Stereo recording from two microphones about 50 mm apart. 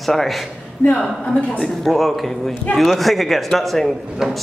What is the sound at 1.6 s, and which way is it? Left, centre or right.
Speech, centre.